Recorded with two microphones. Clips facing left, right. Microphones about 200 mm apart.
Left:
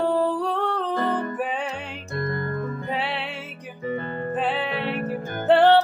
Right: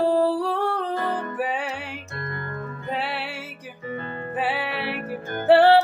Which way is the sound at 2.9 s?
5° right (ahead or behind).